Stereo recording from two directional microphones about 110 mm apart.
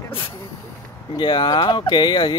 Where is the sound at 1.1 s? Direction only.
40° left (ahead or behind).